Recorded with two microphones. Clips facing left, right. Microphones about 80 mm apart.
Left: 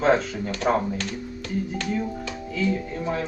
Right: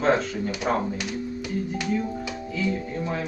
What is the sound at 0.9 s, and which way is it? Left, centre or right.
Speech, centre.